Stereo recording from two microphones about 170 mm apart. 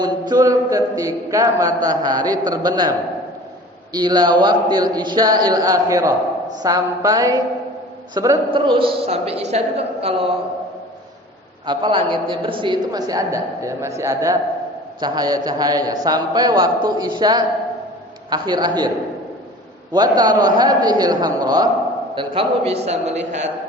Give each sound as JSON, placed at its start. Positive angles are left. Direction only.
{"t": 0.0, "sound": "a man's voice", "side_deg": -25}
{"t": 3.9, "sound": "a man's voice", "side_deg": -25}
{"t": 8.4, "sound": "a woman's voice", "side_deg": -30}
{"t": 11.6, "sound": "a man's voice", "side_deg": -25}
{"t": 19.9, "sound": "a man's voice", "side_deg": -25}